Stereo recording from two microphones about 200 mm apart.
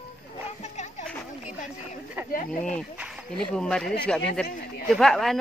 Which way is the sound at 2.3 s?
45° left (ahead or behind).